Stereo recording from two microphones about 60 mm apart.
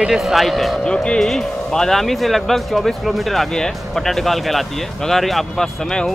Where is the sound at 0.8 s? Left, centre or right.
Centre.